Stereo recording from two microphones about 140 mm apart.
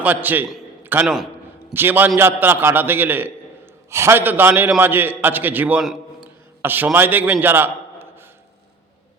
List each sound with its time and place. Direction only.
0.0 s a man's voice: 10° right (ahead or behind)
0.8 s a sound: 15° right (ahead or behind)
1.0 s a man's voice: centre (ahead or behind)
1.7 s a man's voice: 15° right (ahead or behind)